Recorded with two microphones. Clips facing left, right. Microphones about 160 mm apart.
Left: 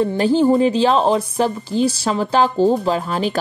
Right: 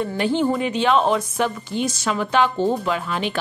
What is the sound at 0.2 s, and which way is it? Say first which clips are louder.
A woman's voice: left 6 dB; 35° left (ahead or behind).